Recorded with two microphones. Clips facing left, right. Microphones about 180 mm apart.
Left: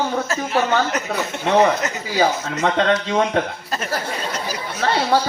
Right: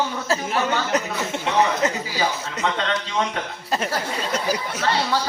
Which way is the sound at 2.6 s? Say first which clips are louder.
Left 6 dB; 45° left (ahead or behind).